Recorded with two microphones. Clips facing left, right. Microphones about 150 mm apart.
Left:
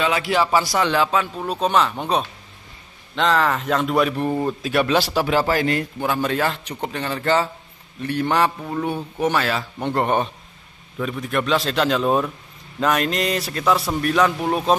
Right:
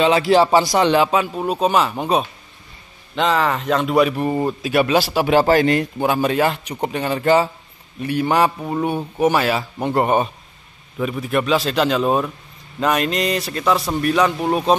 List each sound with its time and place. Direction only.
0.0 s a man's voice: 25° right (ahead or behind); by 5.2 s 5° right (ahead or behind)
5.2 s a man's voice: 25° right (ahead or behind); by 14.8 s centre (ahead or behind)